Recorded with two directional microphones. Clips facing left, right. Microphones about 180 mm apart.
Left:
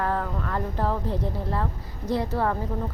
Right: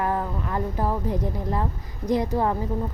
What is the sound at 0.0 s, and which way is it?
Speech, 15° right (ahead or behind).